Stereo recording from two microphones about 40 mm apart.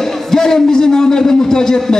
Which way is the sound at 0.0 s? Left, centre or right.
Centre.